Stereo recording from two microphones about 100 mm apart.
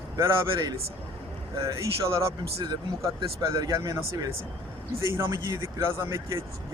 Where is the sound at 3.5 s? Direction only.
35° right (ahead or behind).